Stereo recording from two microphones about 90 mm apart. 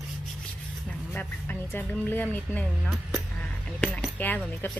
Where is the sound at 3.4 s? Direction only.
10° left (ahead or behind).